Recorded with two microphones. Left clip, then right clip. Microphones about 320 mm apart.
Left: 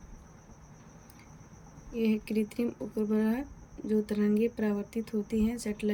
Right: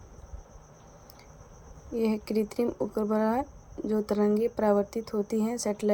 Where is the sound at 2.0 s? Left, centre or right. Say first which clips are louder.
Right 3 dB; centre.